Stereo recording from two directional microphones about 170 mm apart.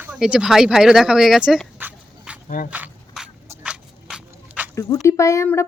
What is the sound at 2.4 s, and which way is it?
Speech, 55° left (ahead or behind).